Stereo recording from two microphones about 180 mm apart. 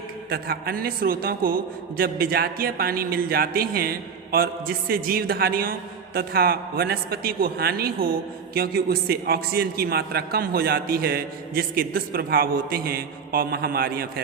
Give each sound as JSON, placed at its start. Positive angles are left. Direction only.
{"t": 0.3, "sound": "a man's voice", "side_deg": -55}